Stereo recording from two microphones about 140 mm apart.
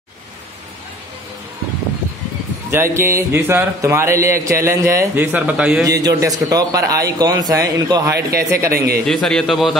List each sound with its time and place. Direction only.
2.7 s speech: 20° right (ahead or behind)
5.9 s speech: 25° right (ahead or behind)
8.7 s a man's voice: 90° right
9.0 s a man's voice: 5° left (ahead or behind)